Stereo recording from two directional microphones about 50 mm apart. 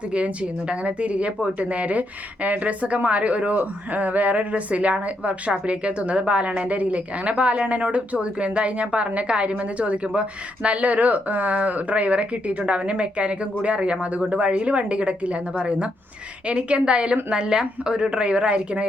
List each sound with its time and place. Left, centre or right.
0.1 s a woman's voice: right